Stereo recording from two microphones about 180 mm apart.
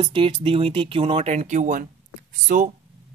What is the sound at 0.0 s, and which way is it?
Speech, 30° right (ahead or behind).